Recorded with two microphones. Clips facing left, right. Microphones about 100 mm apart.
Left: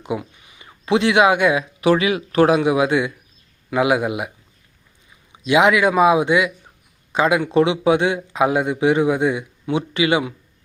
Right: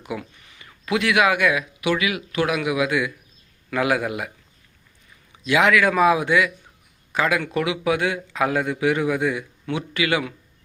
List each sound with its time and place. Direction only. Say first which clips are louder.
0.0 s speech: left 5 dB; 20° left (ahead or behind)
3.7 s speech: left 4 dB; 20° left (ahead or behind)
5.3 s speech: left 3 dB; 20° left (ahead or behind)